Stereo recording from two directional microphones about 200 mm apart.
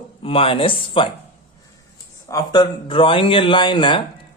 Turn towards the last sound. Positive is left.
turn(degrees=25)  # may be behind; listen again after turning